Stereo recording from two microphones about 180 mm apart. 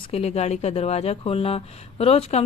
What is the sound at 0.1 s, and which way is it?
Speech, 35° left (ahead or behind).